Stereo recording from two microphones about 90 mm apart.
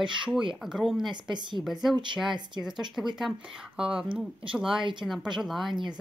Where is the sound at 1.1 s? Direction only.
55° right (ahead or behind).